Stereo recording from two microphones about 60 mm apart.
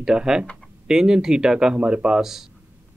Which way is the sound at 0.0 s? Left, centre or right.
Centre.